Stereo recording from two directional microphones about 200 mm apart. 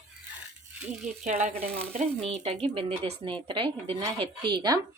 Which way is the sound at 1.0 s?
35° right (ahead or behind).